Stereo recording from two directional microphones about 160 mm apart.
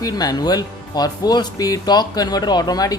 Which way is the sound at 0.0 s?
25° left (ahead or behind).